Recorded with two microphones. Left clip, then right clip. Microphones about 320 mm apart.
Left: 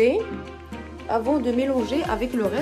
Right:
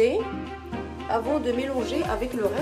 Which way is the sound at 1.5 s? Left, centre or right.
Centre.